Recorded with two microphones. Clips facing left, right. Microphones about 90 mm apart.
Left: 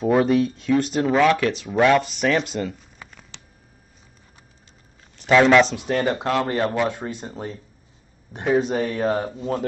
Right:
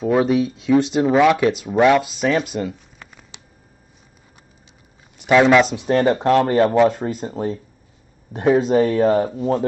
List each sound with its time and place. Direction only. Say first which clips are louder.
0.0 s speech: right 1 dB; centre (ahead or behind)
1.1 s speech: right 3 dB; 15° right (ahead or behind)
3.0 s a sound: left 1 dB; 5° left (ahead or behind)
5.1 s speech: right 2 dB; 10° right (ahead or behind)
5.9 s speech: right 6 dB; 40° right (ahead or behind); by 9.3 s 60° right (ahead or behind)